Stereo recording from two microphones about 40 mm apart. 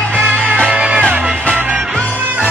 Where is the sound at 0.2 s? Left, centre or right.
Centre.